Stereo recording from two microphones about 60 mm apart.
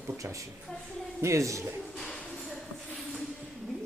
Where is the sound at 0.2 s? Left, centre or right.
Right.